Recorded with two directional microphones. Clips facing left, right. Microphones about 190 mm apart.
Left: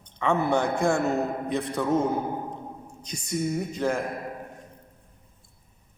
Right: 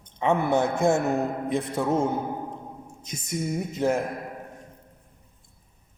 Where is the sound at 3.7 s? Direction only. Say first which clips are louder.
Right 5 dB; 25° right (ahead or behind).